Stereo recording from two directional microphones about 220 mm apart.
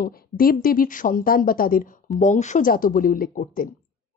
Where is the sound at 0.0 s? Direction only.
40° left (ahead or behind).